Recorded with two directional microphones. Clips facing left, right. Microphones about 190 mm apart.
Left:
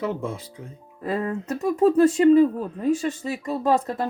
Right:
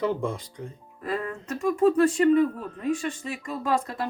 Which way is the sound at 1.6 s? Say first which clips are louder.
Left 3 dB; 40° left (ahead or behind).